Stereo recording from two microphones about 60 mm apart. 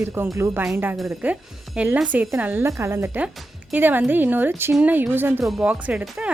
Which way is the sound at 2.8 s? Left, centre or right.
Right.